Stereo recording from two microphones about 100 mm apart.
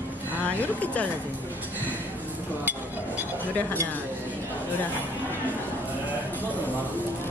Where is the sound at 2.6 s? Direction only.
20° right (ahead or behind).